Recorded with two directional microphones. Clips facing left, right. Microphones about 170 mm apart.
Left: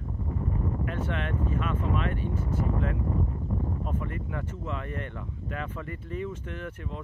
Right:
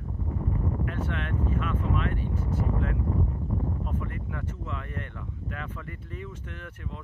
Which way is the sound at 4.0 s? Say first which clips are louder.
Left 1 dB; 25° left (ahead or behind).